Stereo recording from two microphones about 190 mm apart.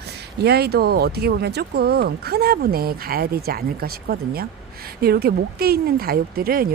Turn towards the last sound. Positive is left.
turn(degrees=-50)  # may be behind; listen again after turning